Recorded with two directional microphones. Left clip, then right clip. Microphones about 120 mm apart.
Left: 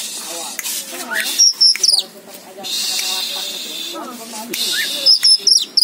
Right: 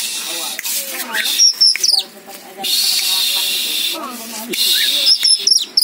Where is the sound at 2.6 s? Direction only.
15° right (ahead or behind).